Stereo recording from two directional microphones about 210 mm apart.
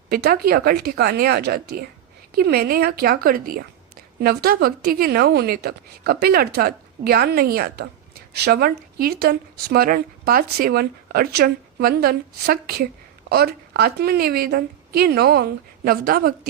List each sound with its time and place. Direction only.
0.1 s speech: 45° right (ahead or behind)